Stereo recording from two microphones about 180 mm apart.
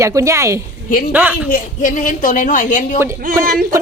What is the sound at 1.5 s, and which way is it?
A woman's voice, 50° left (ahead or behind).